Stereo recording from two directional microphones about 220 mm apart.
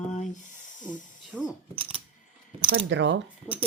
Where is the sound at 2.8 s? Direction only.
55° right (ahead or behind).